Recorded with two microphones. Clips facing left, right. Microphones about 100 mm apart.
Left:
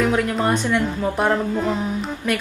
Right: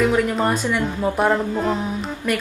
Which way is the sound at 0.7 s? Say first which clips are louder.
Even; 10° right (ahead or behind).